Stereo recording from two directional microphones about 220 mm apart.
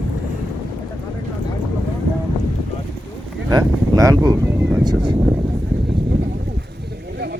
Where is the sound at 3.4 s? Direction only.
15° right (ahead or behind).